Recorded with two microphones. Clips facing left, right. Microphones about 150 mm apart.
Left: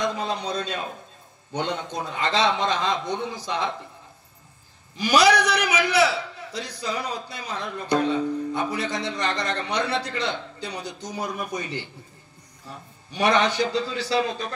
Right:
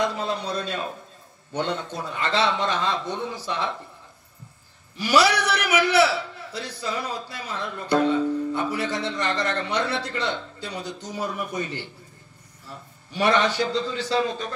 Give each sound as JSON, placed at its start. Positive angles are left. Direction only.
{"t": 0.0, "sound": "a man's voice", "side_deg": 15}
{"t": 4.9, "sound": "a man's voice", "side_deg": 15}
{"t": 13.1, "sound": "a man's voice", "side_deg": 15}